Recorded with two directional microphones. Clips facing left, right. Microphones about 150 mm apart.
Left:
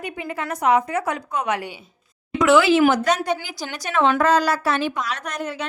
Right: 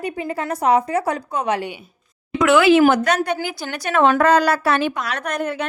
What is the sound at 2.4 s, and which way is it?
A woman's voice, 60° right (ahead or behind).